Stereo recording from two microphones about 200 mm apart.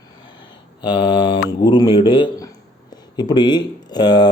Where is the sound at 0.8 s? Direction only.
25° left (ahead or behind).